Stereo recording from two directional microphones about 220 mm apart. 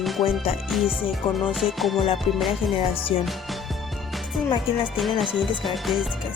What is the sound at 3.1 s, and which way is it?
Speech, 25° left (ahead or behind).